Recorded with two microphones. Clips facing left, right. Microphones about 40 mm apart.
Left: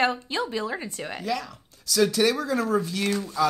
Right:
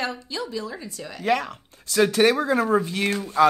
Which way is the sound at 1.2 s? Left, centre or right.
Right.